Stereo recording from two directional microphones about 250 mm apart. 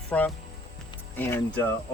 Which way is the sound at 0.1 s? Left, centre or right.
Centre.